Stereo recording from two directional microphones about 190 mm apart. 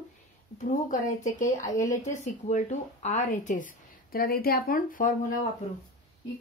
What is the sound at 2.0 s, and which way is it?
Speech, 40° left (ahead or behind).